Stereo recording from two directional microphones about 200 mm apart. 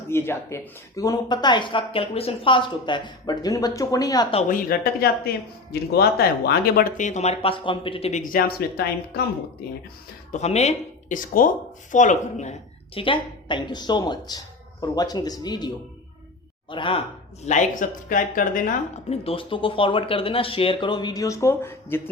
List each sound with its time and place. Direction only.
0.1 s speech: 10° left (ahead or behind)
4.4 s speech: 45° left (ahead or behind)
10.3 s speech: 35° left (ahead or behind)
17.4 s speech: 40° left (ahead or behind); by 22.1 s 10° left (ahead or behind)